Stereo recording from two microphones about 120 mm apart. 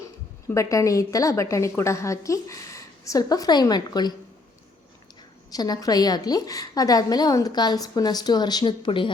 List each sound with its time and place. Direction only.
0.0 s speech: 25° left (ahead or behind)
5.5 s a woman's voice: 30° left (ahead or behind)